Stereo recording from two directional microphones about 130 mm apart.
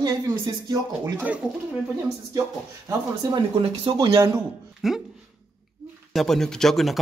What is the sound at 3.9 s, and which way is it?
Speech, 35° right (ahead or behind).